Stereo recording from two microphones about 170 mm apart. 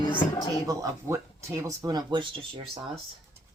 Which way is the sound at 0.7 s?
20° right (ahead or behind).